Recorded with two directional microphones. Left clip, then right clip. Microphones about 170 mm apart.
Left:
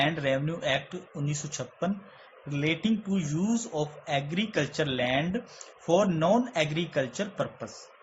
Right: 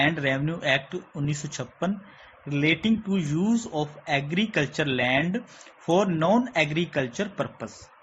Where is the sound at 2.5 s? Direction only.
25° right (ahead or behind).